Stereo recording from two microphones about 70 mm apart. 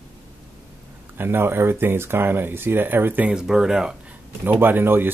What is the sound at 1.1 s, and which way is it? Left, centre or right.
Speech, right.